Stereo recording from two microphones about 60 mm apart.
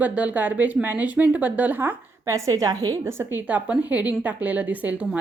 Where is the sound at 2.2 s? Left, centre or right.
Right.